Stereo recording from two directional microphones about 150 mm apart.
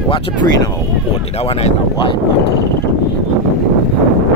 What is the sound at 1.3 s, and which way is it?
Speech, 40° left (ahead or behind).